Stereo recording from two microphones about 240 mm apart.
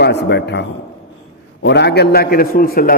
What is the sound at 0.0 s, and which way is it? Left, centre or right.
Speech, left.